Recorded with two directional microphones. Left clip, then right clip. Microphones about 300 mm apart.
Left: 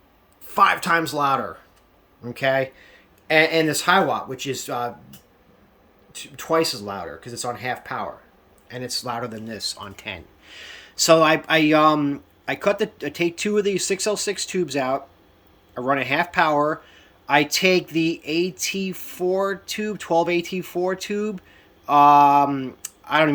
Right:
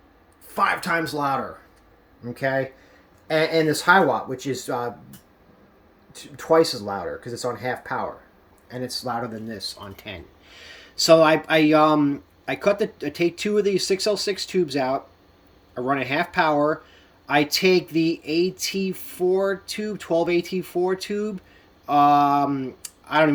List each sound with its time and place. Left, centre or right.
0.8 s speech: centre
6.6 s speech: centre
6.8 s speech: centre
7.4 s speech: centre
9.2 s speech: centre